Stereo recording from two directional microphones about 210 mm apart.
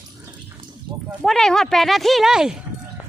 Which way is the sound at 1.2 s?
Centre (ahead or behind).